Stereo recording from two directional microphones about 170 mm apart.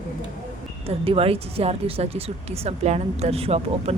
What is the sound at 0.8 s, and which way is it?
Speech, 35° right (ahead or behind).